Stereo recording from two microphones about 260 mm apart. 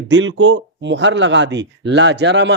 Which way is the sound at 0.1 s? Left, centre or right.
Right.